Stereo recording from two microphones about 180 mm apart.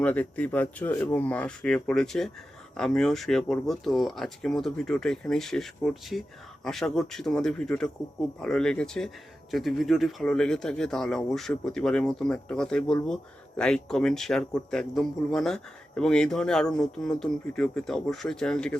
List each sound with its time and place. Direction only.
0.0 s speech: 10° left (ahead or behind)